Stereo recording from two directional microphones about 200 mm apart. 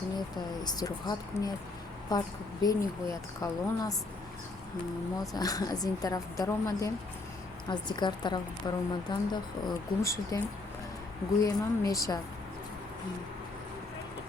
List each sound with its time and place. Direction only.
0.6 s a woman's voice: 20° left (ahead or behind)
5.2 s a woman's voice: 20° left (ahead or behind)
11.4 s speech: 15° left (ahead or behind)